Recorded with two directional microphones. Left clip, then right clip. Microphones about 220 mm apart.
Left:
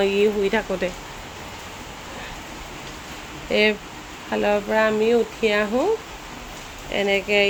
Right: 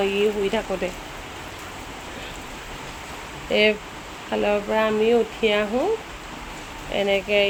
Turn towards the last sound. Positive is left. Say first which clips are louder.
# left 1 dB
turn(degrees=10)  # may be behind; listen again after turning